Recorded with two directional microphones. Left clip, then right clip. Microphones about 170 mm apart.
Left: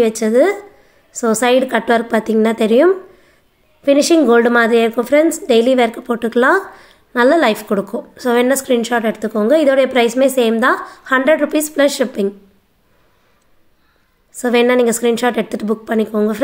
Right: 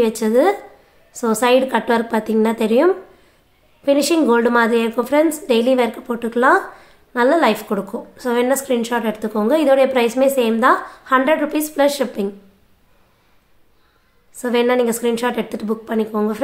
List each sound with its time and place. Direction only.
0.0 s a woman's voice: 15° left (ahead or behind)
14.3 s a woman's voice: 25° left (ahead or behind)